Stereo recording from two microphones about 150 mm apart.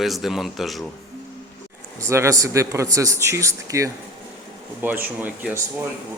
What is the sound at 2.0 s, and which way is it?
Speech, 20° right (ahead or behind).